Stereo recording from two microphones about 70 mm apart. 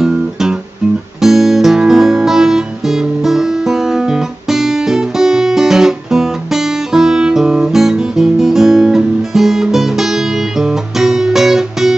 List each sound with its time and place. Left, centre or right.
0.0 s guitar: centre
1.2 s music: centre